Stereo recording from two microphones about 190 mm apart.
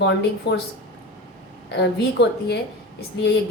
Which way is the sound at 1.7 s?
60° left (ahead or behind).